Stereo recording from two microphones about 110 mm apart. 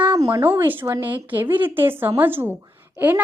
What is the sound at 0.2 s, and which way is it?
A woman's voice, 25° right (ahead or behind).